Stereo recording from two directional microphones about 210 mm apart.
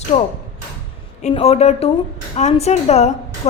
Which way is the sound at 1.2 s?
30° left (ahead or behind).